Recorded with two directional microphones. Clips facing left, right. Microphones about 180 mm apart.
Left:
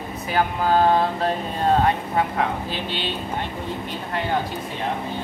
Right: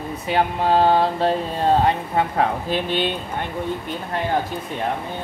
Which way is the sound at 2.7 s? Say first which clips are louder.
Right 6 dB; 50° right (ahead or behind).